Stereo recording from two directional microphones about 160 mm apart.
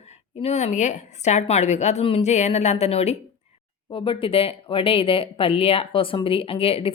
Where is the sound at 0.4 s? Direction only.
45° left (ahead or behind).